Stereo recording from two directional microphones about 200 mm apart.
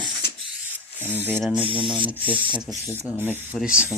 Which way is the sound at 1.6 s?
25° left (ahead or behind).